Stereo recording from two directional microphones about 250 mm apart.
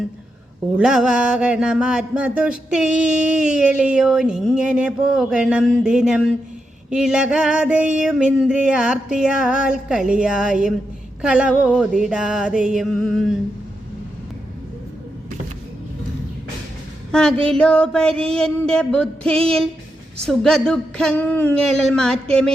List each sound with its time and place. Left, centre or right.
0.8 s mantra: centre
17.1 s mantra: centre